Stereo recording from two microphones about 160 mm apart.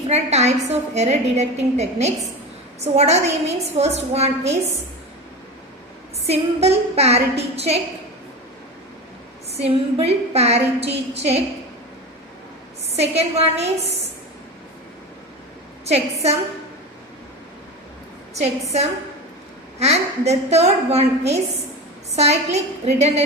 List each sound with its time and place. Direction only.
0.1 s a woman's voice: 45° right (ahead or behind)
6.2 s a woman's voice: 40° right (ahead or behind)
9.5 s a woman's voice: 40° right (ahead or behind)
13.0 s a woman's voice: 40° right (ahead or behind)
15.9 s a woman's voice: 40° right (ahead or behind)
18.3 s a woman's voice: 45° right (ahead or behind)